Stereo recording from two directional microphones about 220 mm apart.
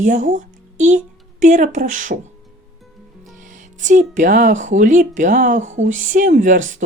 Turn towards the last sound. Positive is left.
turn(degrees=-35)  # may be behind; listen again after turning